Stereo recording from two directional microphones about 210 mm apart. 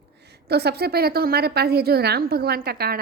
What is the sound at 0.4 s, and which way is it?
A woman's voice, 50° right (ahead or behind).